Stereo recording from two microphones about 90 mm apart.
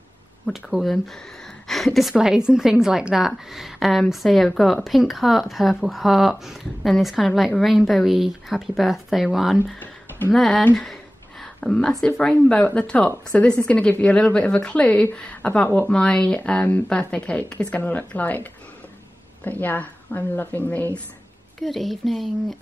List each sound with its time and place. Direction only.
0.5 s speech: 5° right (ahead or behind)
10.8 s a sound: 5° left (ahead or behind)
12.2 s a woman's voice: 10° left (ahead or behind)
19.6 s a woman's voice: 20° left (ahead or behind)
21.5 s speech: centre (ahead or behind)